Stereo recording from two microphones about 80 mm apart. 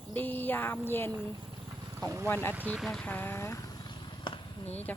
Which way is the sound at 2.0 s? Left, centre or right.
Right.